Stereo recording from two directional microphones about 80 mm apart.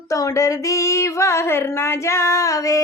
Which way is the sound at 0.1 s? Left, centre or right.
Left.